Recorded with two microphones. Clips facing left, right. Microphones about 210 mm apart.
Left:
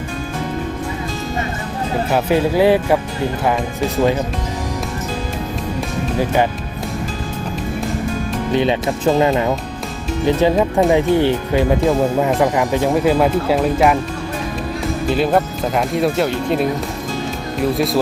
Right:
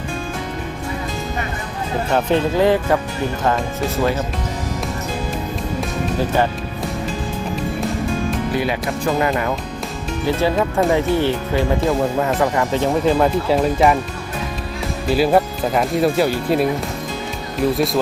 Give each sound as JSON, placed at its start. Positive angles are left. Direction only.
{"t": 2.0, "sound": "speech", "side_deg": 10}
{"t": 3.4, "sound": "speech", "side_deg": 0}
{"t": 6.1, "sound": "speech", "side_deg": 15}
{"t": 8.5, "sound": "speech", "side_deg": 25}
{"t": 15.1, "sound": "speech", "side_deg": -5}